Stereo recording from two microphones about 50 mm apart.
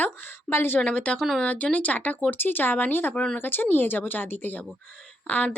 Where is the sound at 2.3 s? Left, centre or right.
Left.